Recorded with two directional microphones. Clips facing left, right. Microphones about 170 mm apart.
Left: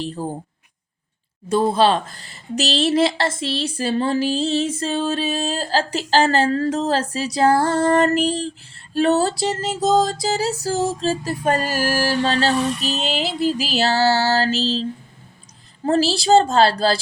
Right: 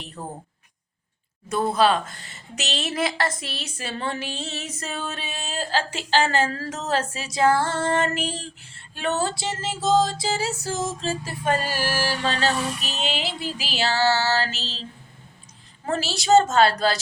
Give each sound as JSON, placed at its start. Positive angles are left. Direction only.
{"t": 0.0, "sound": "speech", "side_deg": 30}
{"t": 1.5, "sound": "speech", "side_deg": 30}
{"t": 15.9, "sound": "speech", "side_deg": 35}